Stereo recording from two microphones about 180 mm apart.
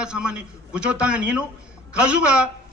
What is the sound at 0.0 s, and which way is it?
A man's voice, 5° right (ahead or behind).